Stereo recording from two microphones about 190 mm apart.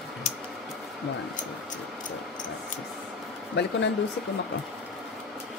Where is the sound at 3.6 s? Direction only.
65° left (ahead or behind).